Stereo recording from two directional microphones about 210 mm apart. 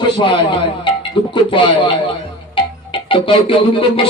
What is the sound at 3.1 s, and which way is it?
Music, 25° left (ahead or behind).